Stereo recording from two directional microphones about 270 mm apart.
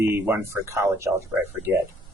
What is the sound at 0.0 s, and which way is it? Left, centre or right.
Speech, centre.